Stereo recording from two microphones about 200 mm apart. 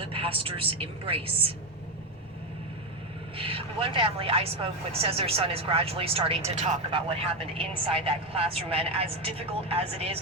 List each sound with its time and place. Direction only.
0.0 s speech: 30° right (ahead or behind)
3.3 s speech: 30° right (ahead or behind)